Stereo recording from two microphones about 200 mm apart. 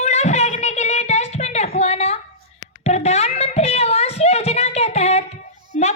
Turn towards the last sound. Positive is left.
turn(degrees=35)  # may be behind; listen again after turning